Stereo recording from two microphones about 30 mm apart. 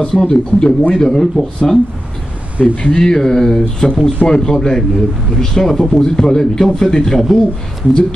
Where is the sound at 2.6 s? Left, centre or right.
Left.